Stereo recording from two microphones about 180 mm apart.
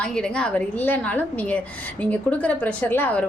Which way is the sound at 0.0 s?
5° left (ahead or behind).